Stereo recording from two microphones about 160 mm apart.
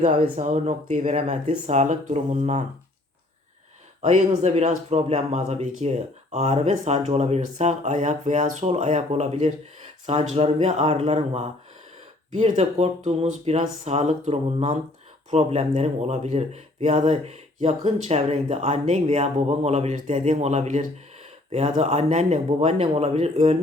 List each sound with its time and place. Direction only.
0.0 s speech: 50° right (ahead or behind)
4.0 s speech: 45° right (ahead or behind)